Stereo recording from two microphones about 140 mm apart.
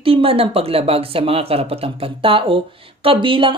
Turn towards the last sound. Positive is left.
turn(degrees=-40)  # may be behind; listen again after turning